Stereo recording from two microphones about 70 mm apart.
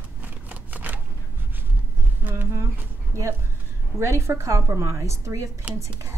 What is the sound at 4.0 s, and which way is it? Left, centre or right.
Speech, right.